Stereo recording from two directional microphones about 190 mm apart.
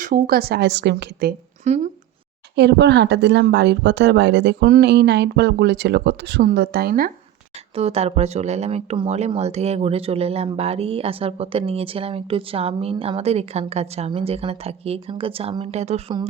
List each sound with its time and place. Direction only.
0.0 s speech: 50° right (ahead or behind)
1.6 s speech: 35° right (ahead or behind)
2.6 s speech: 65° right (ahead or behind)
7.8 s speech: 30° right (ahead or behind)